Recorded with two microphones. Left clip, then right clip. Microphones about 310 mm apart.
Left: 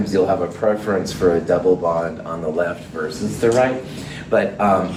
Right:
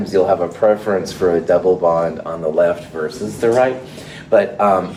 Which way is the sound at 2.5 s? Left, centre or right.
Right.